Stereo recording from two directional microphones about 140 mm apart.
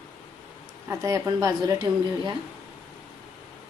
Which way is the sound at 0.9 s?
25° right (ahead or behind).